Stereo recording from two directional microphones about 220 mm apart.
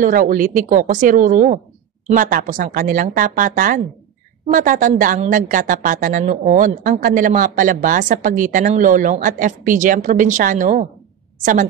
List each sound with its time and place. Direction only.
0.0 s a woman's voice: 40° right (ahead or behind)